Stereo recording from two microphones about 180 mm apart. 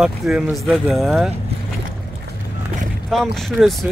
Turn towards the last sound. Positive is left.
turn(degrees=0)  # may be behind; listen again after turning